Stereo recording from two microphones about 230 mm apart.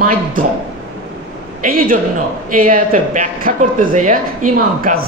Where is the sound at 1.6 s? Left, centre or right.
Right.